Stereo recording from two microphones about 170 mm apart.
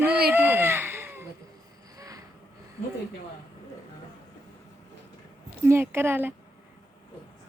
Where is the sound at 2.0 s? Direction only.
20° right (ahead or behind).